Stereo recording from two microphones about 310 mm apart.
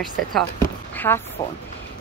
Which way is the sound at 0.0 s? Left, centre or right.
Centre.